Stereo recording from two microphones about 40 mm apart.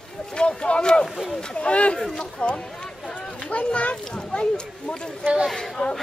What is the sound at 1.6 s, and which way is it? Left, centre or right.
Speech, left.